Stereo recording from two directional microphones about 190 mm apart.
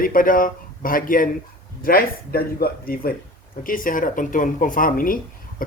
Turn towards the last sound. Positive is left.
turn(degrees=45)  # may be behind; listen again after turning